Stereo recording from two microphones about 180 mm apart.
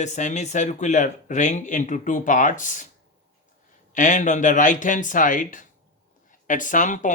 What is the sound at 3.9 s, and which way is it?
Speech, 45° left (ahead or behind).